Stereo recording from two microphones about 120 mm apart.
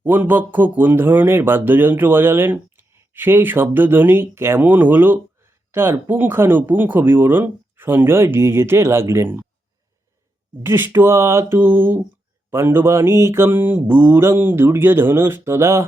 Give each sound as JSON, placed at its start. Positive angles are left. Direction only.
{"t": 0.0, "sound": "speech", "side_deg": -15}
{"t": 10.6, "sound": "speech", "side_deg": -20}